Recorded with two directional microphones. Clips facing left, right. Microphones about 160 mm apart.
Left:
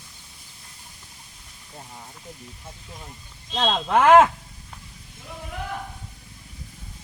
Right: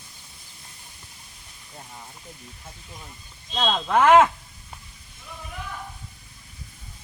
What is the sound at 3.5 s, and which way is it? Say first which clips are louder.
Speech: left 1 dB; 20° left (ahead or behind).